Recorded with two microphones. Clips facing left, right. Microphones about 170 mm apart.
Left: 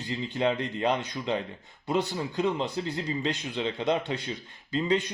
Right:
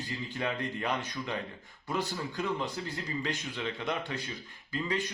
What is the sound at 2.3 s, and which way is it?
Speech, 25° left (ahead or behind).